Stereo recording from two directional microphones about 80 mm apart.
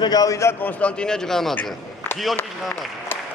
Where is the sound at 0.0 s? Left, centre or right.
Left.